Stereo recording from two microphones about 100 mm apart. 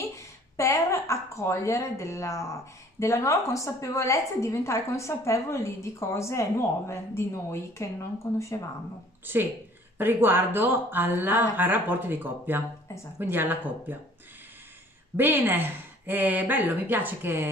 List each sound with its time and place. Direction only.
0.1 s a woman's voice: 35° left (ahead or behind)
9.2 s speech: 20° right (ahead or behind)
15.1 s speech: 20° right (ahead or behind)